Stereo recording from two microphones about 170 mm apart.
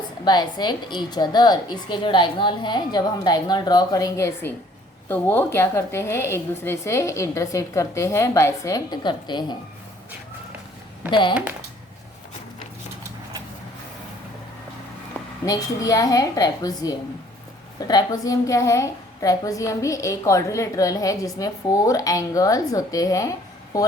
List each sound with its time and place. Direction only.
0.3 s a woman's voice: 25° left (ahead or behind)
11.1 s a woman's voice: 30° left (ahead or behind)
15.4 s a woman's voice: 20° left (ahead or behind)